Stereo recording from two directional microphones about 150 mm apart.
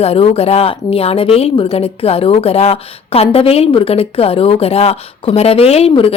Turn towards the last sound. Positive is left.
turn(degrees=40)  # may be behind; listen again after turning